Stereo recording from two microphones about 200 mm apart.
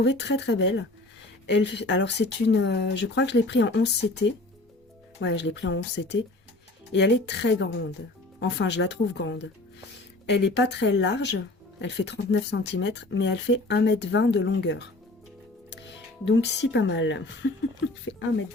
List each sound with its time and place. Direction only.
0.0 s speech: 60° left (ahead or behind)
5.2 s speech: 60° left (ahead or behind)
16.2 s speech: 60° left (ahead or behind)